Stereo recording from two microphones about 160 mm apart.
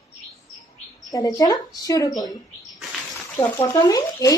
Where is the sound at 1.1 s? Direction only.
20° left (ahead or behind).